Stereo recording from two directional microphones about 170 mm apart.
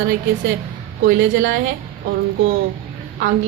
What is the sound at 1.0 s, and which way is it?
Speech, 70° right (ahead or behind).